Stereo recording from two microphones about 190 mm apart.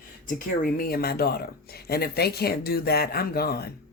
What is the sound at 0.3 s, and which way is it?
Speech, 45° left (ahead or behind).